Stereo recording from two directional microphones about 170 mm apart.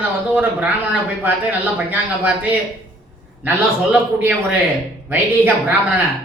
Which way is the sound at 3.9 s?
10° right (ahead or behind).